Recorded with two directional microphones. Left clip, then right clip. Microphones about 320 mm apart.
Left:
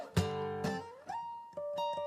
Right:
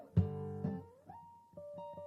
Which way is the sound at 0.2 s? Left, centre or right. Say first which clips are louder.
Left 7 dB; centre.